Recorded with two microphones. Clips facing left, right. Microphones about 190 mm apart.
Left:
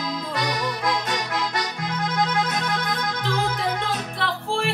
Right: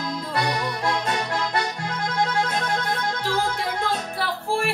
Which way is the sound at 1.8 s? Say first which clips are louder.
Left 1 dB; 35° right (ahead or behind).